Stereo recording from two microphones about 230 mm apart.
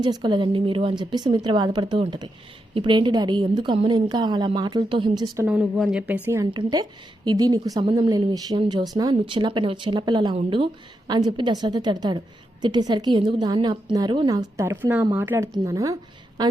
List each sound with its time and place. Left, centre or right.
0.0 s speech: centre
5.5 s speech: centre